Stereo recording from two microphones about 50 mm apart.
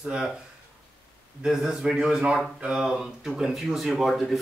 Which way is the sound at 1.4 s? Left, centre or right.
Centre.